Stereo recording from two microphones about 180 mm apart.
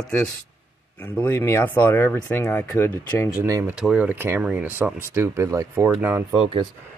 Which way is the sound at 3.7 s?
5° right (ahead or behind).